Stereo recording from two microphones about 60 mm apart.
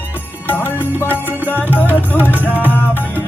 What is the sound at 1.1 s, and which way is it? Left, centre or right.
Music, right.